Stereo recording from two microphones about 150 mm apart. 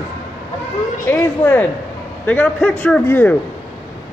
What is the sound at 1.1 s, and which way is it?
A man's voice, 15° left (ahead or behind).